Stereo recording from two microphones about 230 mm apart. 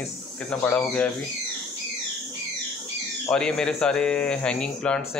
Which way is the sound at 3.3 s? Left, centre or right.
Centre.